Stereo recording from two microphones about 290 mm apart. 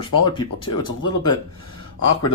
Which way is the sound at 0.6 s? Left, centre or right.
Left.